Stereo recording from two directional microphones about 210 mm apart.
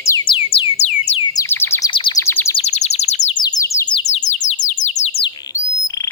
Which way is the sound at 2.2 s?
10° left (ahead or behind).